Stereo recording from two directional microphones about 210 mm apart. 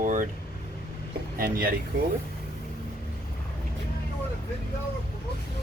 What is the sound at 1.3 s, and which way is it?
Speech, 45° right (ahead or behind).